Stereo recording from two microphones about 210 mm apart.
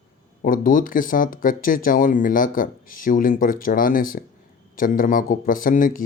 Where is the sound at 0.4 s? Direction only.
40° left (ahead or behind).